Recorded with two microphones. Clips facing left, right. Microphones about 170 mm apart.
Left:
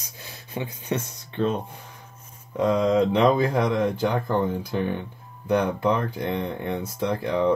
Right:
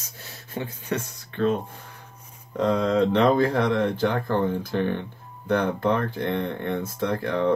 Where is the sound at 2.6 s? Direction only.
10° left (ahead or behind).